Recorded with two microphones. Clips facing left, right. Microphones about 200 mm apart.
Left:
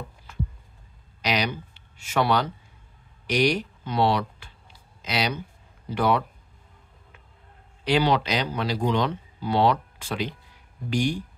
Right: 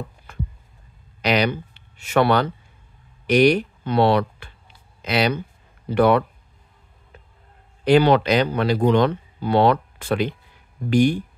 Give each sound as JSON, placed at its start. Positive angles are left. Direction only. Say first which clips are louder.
{"t": 0.3, "sound": "a sound", "louder": "left 1 dB", "side_deg": -55}
{"t": 1.2, "sound": "speech", "louder": "right 6 dB", "side_deg": -60}
{"t": 7.8, "sound": "speech", "louder": "right 7 dB", "side_deg": -55}